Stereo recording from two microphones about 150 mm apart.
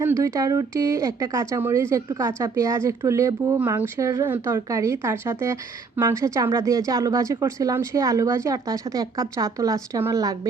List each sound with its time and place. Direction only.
0.0 s speech: 20° right (ahead or behind)